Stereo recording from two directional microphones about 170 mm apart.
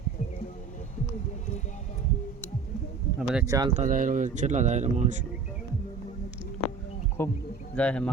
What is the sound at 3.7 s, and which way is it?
Speech, 45° right (ahead or behind).